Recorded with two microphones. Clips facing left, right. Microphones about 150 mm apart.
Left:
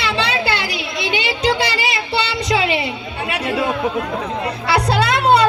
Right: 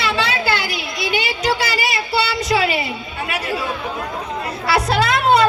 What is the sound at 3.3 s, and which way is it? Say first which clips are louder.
Chatter: left 3 dB; 25° left (ahead or behind).